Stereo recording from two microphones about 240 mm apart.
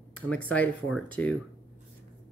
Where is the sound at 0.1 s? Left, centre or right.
Centre.